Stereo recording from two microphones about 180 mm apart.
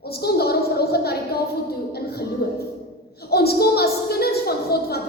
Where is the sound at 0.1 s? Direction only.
60° left (ahead or behind).